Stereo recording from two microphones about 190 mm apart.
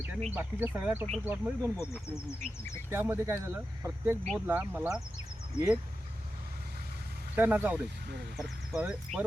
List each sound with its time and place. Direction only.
0.3 s speech: 10° right (ahead or behind)
1.8 s speech: 15° left (ahead or behind)
2.9 s speech: 10° right (ahead or behind)
7.3 s speech: 10° right (ahead or behind)
8.0 s speech: 65° right (ahead or behind)
8.4 s speech: 5° right (ahead or behind)